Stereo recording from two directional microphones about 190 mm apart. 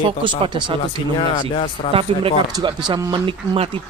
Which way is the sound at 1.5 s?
30° left (ahead or behind).